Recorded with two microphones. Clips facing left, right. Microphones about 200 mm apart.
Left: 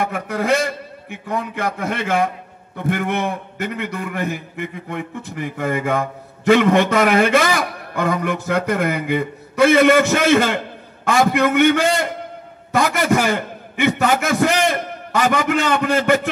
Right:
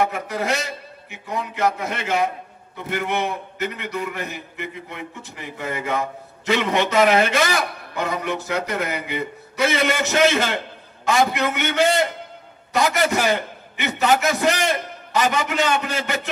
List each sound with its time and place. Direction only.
0.0 s a man's voice: 55° left (ahead or behind)